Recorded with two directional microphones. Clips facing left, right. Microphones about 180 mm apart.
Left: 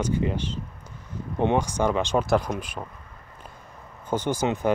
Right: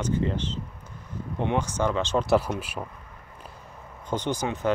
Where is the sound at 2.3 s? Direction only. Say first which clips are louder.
Right 1 dB; 5° right (ahead or behind).